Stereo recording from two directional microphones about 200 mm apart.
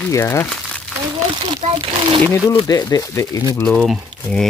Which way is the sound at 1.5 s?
25° right (ahead or behind).